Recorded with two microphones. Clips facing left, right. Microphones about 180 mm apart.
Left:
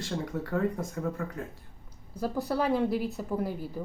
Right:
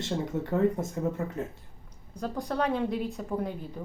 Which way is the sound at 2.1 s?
5° left (ahead or behind).